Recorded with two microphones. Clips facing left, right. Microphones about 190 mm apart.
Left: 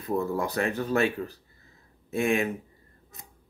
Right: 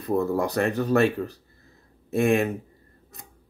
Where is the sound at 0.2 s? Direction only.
70° right (ahead or behind).